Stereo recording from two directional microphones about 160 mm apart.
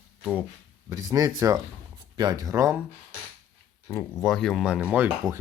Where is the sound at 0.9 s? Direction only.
20° right (ahead or behind).